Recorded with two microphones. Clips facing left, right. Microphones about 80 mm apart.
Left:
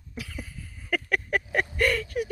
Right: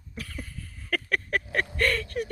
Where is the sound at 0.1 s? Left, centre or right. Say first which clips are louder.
Left 1 dB; centre.